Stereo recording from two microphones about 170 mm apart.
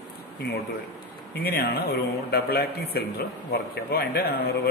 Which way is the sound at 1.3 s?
65° left (ahead or behind).